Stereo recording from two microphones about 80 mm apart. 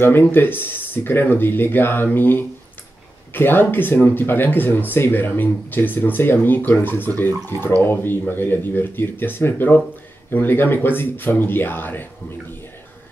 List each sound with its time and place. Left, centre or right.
0.0 s speech: left